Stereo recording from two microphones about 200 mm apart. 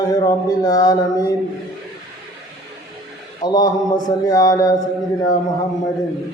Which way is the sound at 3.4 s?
20° left (ahead or behind).